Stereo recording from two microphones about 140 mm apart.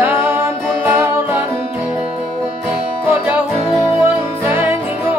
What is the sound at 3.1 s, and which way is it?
Music, 15° right (ahead or behind).